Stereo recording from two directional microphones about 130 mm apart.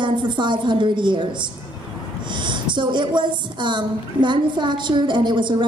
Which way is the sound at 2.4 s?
35° right (ahead or behind).